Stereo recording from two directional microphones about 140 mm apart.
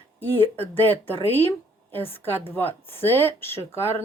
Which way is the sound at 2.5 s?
15° left (ahead or behind).